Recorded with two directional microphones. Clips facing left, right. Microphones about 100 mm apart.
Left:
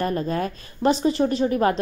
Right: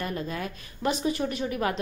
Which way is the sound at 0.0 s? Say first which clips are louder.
Left 8 dB; 45° left (ahead or behind).